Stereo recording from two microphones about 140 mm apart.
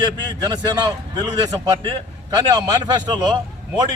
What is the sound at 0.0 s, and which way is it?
A man's voice, 30° right (ahead or behind).